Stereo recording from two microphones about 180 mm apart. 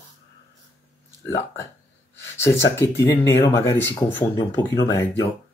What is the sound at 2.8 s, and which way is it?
Speech, 15° left (ahead or behind).